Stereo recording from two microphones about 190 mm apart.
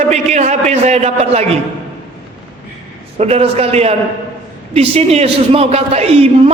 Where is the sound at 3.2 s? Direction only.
30° right (ahead or behind).